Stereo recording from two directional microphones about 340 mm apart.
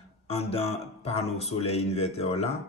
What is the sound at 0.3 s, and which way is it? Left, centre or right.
Speech, centre.